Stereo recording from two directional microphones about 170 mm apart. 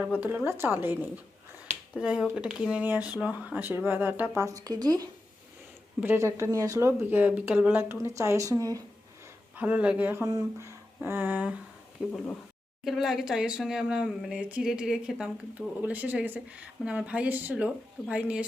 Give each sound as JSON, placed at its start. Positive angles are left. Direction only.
{"t": 0.2, "sound": "speech", "side_deg": -10}
{"t": 9.6, "sound": "speech", "side_deg": -10}
{"t": 12.1, "sound": "speech", "side_deg": 10}
{"t": 12.8, "sound": "speech", "side_deg": 0}